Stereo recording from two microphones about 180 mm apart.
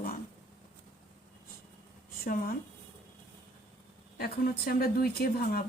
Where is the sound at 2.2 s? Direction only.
55° left (ahead or behind).